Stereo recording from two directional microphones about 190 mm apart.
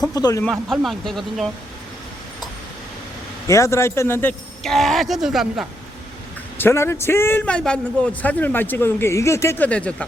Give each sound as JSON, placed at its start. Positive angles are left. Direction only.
{"t": 0.1, "sound": "speech", "side_deg": 20}
{"t": 0.4, "sound": "speech", "side_deg": 0}
{"t": 3.4, "sound": "speech", "side_deg": 15}
{"t": 6.6, "sound": "a man's voice", "side_deg": 15}